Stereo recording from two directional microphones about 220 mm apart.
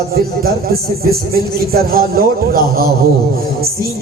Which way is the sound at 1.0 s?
45° right (ahead or behind).